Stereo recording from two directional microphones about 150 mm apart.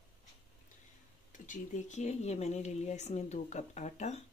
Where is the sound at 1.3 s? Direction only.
60° left (ahead or behind).